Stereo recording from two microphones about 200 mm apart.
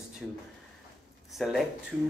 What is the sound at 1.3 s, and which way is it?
Speech, centre (ahead or behind).